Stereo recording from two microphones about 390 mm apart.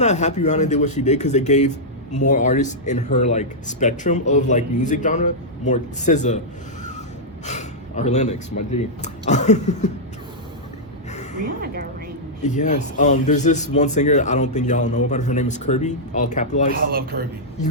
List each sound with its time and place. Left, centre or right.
0.0 s a man's voice: centre
7.4 s a man's voice: centre
11.1 s a sound: centre
11.6 s music: right
12.4 s a man's voice: centre
16.7 s speech: right